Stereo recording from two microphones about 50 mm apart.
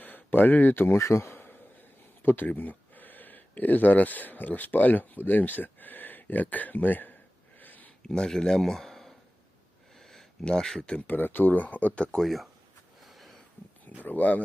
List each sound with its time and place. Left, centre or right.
0.0 s speech: left
0.9 s speech: left
7.6 s a sound: left
8.0 s speech: centre
10.0 s a sound: centre
10.4 s speech: centre
11.0 s speech: left
12.2 s speech: centre
13.0 s a sound: centre
14.0 s speech: left